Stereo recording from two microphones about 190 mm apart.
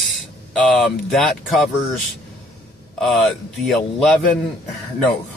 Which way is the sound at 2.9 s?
Centre (ahead or behind).